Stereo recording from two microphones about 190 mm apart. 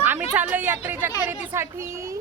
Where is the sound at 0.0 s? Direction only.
10° right (ahead or behind).